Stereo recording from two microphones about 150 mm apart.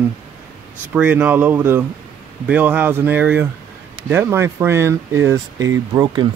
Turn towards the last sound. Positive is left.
turn(degrees=-30)  # may be behind; listen again after turning